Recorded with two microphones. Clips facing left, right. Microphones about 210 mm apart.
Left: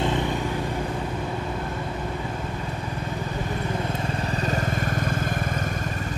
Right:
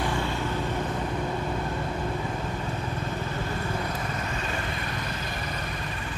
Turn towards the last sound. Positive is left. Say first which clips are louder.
# left 6 dB
turn(degrees=50)  # may be behind; listen again after turning